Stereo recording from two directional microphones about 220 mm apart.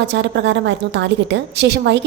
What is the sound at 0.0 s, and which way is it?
A woman's voice, 50° right (ahead or behind).